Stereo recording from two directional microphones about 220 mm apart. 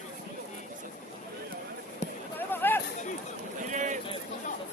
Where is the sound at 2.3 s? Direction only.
10° left (ahead or behind).